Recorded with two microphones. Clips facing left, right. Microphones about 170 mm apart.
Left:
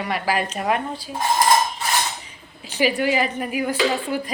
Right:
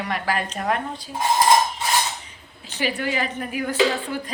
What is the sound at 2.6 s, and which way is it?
A woman's voice, 10° left (ahead or behind).